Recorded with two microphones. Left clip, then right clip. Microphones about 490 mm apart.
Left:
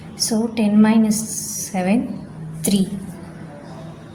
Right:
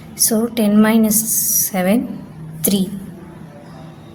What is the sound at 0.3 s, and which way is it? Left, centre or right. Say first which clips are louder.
A woman's voice: right 4 dB; right.